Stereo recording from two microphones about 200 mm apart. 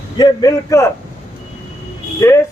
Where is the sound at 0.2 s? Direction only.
15° left (ahead or behind).